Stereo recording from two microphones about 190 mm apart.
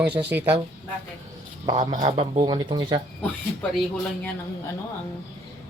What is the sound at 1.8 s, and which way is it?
Speech, 40° right (ahead or behind).